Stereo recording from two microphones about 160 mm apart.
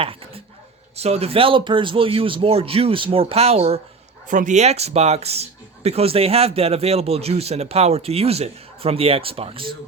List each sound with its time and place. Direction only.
0.0 s dog: 35° right (ahead or behind)
0.9 s speech: 40° right (ahead or behind)
4.3 s speech: 55° right (ahead or behind); by 9.7 s 35° right (ahead or behind)